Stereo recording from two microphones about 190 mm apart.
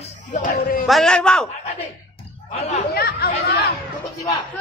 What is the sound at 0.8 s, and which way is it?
Speech, centre (ahead or behind).